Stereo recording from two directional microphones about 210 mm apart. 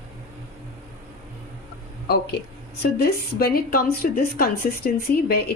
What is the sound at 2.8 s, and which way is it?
A woman's voice, 50° left (ahead or behind).